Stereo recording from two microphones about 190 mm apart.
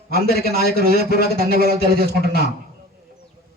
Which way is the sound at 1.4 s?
55° right (ahead or behind).